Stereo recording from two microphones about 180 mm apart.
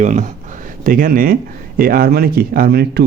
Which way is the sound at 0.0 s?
45° right (ahead or behind).